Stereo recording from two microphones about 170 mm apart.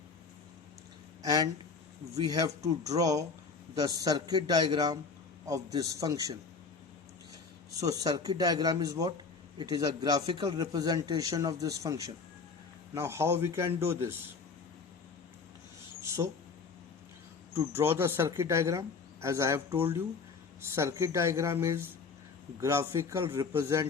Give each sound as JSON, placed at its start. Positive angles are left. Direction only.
{"t": 1.2, "sound": "a man's voice", "side_deg": -20}
{"t": 7.8, "sound": "a man's voice", "side_deg": -20}
{"t": 16.0, "sound": "a sound", "side_deg": -15}
{"t": 17.5, "sound": "speech", "side_deg": -15}